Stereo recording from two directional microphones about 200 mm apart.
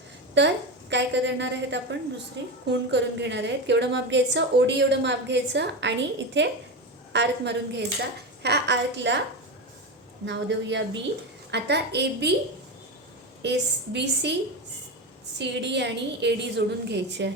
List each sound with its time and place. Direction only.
0.3 s a woman's voice: 60° right (ahead or behind)
10.2 s a woman's voice: 65° right (ahead or behind)
13.4 s a woman's voice: 60° right (ahead or behind)
15.4 s a woman's voice: 60° right (ahead or behind)